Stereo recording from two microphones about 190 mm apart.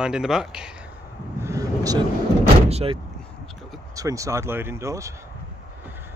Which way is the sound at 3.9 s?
15° right (ahead or behind).